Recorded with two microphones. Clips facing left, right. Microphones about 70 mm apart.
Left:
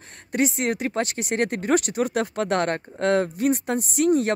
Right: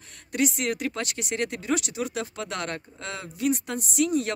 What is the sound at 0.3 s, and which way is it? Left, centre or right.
A woman's voice, left.